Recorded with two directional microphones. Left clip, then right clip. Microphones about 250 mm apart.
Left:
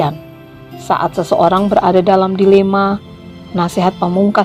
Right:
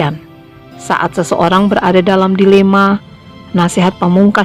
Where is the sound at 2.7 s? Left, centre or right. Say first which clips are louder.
Right 4 dB; right.